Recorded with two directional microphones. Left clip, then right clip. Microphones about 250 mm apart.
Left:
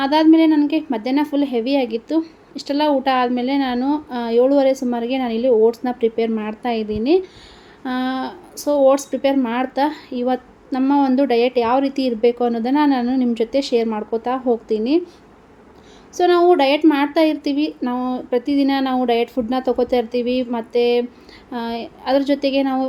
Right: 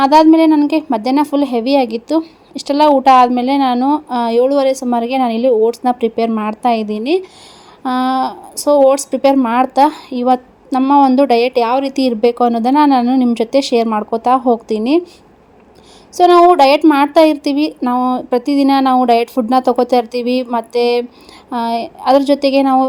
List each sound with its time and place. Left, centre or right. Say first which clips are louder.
0.0 s a woman's voice: right 6 dB; right
16.1 s a woman's voice: right 7 dB; right